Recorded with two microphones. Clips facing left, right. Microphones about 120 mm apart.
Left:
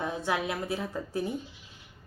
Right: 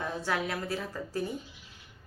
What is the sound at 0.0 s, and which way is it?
A woman's voice, 20° left (ahead or behind).